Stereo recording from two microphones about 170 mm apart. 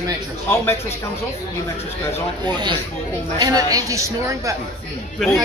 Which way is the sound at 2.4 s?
25° right (ahead or behind).